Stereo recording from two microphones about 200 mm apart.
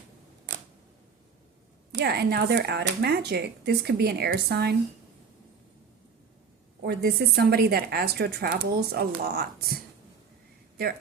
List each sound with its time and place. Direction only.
2.0 s a woman's voice: 55° right (ahead or behind)
6.8 s a woman's voice: 55° right (ahead or behind)